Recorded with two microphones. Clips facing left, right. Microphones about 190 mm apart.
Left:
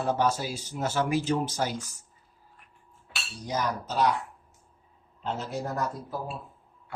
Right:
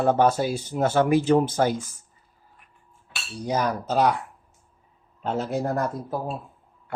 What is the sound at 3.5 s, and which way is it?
Speech, 55° right (ahead or behind).